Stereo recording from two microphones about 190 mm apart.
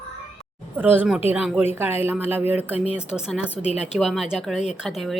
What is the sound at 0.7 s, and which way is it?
Speech, 10° right (ahead or behind).